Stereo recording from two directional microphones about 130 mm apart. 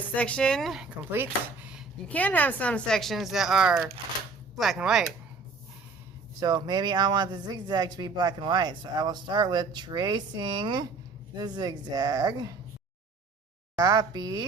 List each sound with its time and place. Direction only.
0.2 s speech: 10° left (ahead or behind)
1.1 s speech: 15° right (ahead or behind)
2.0 s speech: 10° left (ahead or behind); by 5.0 s 5° right (ahead or behind)
6.4 s speech: 30° right (ahead or behind)
13.7 s speech: 30° right (ahead or behind)